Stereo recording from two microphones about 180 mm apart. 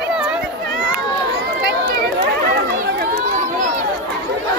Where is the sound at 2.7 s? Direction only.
55° right (ahead or behind).